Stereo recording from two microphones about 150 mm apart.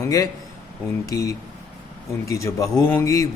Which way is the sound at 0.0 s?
20° left (ahead or behind).